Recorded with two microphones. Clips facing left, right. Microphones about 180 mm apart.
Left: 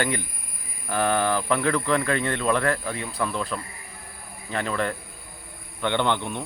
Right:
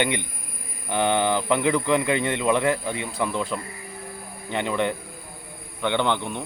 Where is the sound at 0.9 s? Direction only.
20° right (ahead or behind).